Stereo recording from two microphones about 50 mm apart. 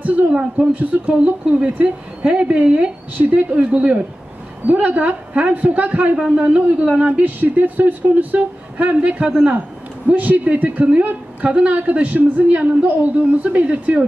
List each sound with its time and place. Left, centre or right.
0.3 s speech: right
4.8 s speech: right
6.1 s speech: centre
7.2 s speech: right
10.0 s speech: right